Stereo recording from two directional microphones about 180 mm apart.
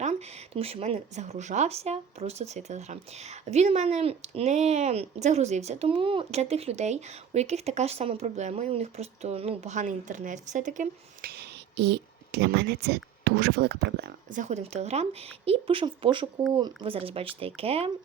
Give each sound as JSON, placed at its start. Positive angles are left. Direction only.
{"t": 0.0, "sound": "speech", "side_deg": -40}